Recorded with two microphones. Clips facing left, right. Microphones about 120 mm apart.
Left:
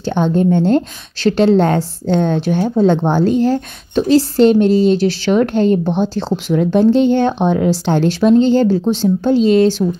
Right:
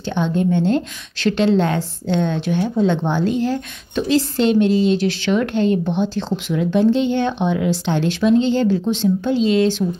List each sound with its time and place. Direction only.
0.1 s a woman's voice: 40° left (ahead or behind)